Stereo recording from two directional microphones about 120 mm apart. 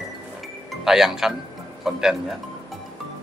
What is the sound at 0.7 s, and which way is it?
Speech, 5° right (ahead or behind).